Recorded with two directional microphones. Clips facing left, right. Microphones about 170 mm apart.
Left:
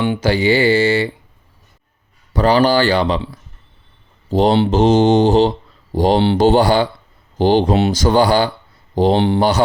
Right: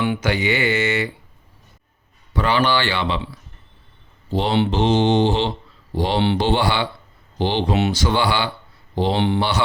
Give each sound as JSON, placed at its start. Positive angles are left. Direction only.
{"t": 0.0, "sound": "speech", "side_deg": 30}
{"t": 2.3, "sound": "speech", "side_deg": 40}
{"t": 4.3, "sound": "speech", "side_deg": 40}